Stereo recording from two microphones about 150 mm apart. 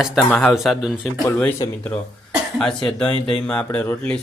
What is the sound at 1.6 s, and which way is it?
Speech, 30° left (ahead or behind).